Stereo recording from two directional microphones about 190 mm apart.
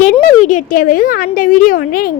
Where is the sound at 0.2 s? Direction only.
40° left (ahead or behind).